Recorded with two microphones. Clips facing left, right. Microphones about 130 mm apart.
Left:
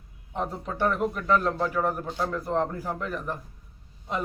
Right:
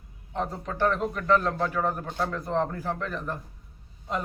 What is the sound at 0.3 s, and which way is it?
A man's voice, 10° left (ahead or behind).